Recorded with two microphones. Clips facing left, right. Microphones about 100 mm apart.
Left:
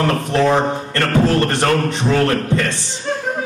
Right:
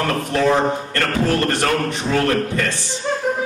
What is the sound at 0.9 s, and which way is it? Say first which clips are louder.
A man's voice: left 6 dB; 20° left (ahead or behind).